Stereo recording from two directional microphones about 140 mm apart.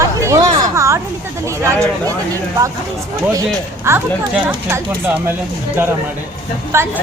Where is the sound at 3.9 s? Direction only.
20° right (ahead or behind).